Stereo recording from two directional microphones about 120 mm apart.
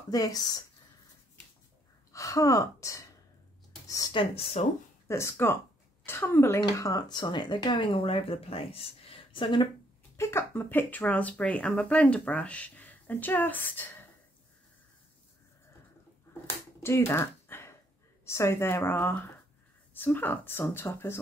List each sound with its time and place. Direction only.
0.1 s speech: 30° left (ahead or behind)
2.1 s speech: 25° left (ahead or behind)
4.1 s speech: 45° left (ahead or behind)
5.0 s speech: 25° left (ahead or behind); by 9.7 s 45° left (ahead or behind)
10.1 s speech: 20° left (ahead or behind)
16.8 s a sound: 20° left (ahead or behind)
18.2 s speech: 25° left (ahead or behind)